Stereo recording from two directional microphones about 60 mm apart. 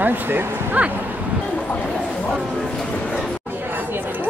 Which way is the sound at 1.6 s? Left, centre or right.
Left.